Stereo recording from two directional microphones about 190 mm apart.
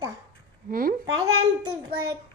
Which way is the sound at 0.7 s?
50° right (ahead or behind).